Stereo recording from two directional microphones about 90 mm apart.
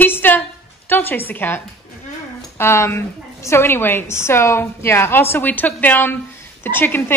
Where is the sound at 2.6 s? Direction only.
30° left (ahead or behind).